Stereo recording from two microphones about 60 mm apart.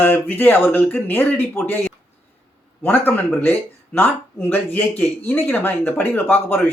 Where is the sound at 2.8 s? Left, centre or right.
Left.